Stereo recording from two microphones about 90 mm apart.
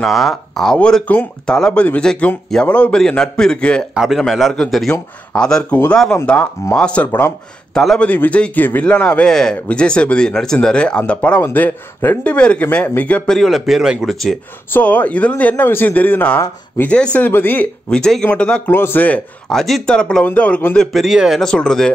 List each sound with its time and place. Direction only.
0.0 s a man's voice: centre (ahead or behind)
3.9 s a man's voice: 5° right (ahead or behind); by 7.3 s 20° left (ahead or behind)
7.7 s a man's voice: 5° left (ahead or behind)
13.3 s speech: centre (ahead or behind)
14.7 s a man's voice: 15° left (ahead or behind)
17.9 s a man's voice: 10° left (ahead or behind)
18.7 s speech: 25° left (ahead or behind)
19.5 s a man's voice: 5° left (ahead or behind)
21.5 s a man's voice: 5° left (ahead or behind)